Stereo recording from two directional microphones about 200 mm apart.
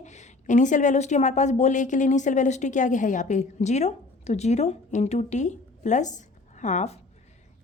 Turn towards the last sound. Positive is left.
turn(degrees=35)  # may be behind; listen again after turning